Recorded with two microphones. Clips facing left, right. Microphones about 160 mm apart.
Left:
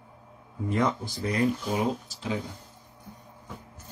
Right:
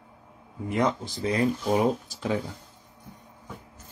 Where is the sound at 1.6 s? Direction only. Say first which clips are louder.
Right 4 dB; 50° right (ahead or behind).